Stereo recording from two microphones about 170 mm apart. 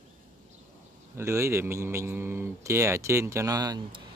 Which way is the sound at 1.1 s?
15° right (ahead or behind).